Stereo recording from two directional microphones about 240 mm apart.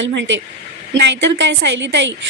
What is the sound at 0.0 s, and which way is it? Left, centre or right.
A woman's voice, right.